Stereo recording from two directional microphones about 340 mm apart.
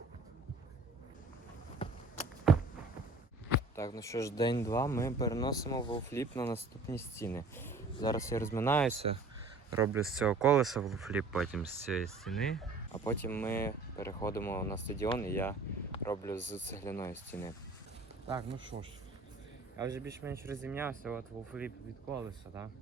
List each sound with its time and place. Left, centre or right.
1.8 s a sound: centre
2.5 s a sound: centre
3.8 s speech: centre
9.7 s speech: centre
18.3 s speech: centre
19.7 s speech: centre